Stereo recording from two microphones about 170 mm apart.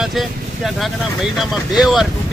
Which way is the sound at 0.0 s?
Centre (ahead or behind).